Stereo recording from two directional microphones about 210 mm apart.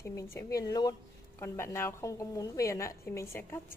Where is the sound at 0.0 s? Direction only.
10° left (ahead or behind).